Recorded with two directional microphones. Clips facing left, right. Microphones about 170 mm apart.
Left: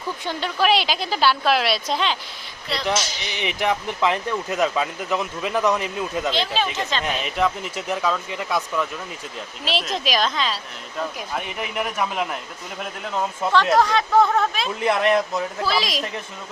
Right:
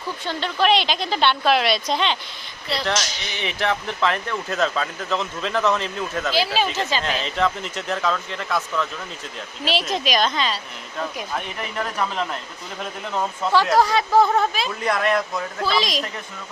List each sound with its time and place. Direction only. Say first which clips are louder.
0.3 s a woman's voice: right 1 dB; 10° left (ahead or behind)
2.8 s speech: left 3 dB; 15° left (ahead or behind)
6.3 s speech: right 2 dB; 5° right (ahead or behind)
7.0 s speech: left 2 dB; 10° left (ahead or behind)
9.6 s a woman's voice: right 2 dB; centre (ahead or behind)
14.8 s speech: left 3 dB; 25° left (ahead or behind)
15.6 s a woman's voice: right 4 dB; centre (ahead or behind)